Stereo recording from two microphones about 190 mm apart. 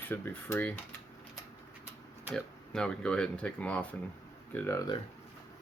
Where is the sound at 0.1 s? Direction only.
15° left (ahead or behind).